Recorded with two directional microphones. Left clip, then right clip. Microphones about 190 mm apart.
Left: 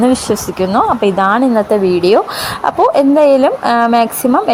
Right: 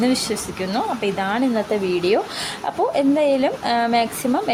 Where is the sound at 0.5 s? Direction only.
25° left (ahead or behind).